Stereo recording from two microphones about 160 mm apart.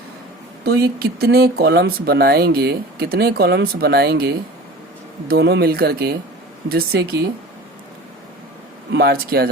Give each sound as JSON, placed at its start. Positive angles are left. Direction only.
{"t": 0.6, "sound": "speech", "side_deg": -80}
{"t": 8.9, "sound": "speech", "side_deg": -85}